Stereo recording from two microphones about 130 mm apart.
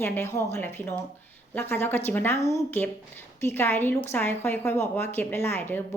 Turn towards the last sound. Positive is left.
turn(degrees=15)  # may be behind; listen again after turning